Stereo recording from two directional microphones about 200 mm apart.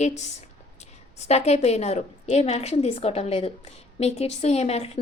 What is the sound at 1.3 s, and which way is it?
Speech, 35° left (ahead or behind).